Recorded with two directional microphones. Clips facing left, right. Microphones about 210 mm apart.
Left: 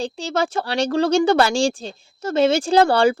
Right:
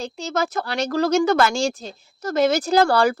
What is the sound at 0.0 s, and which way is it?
Speech, 30° left (ahead or behind).